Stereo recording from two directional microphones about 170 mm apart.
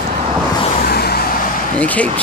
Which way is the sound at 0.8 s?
65° left (ahead or behind).